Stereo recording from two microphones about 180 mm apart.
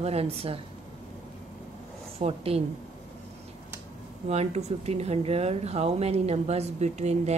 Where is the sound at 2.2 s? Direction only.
35° right (ahead or behind).